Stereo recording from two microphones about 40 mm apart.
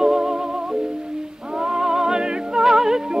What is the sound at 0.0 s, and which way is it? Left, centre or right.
Music, centre.